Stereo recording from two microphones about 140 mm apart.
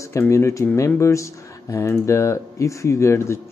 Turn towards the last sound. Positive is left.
turn(degrees=20)  # may be behind; listen again after turning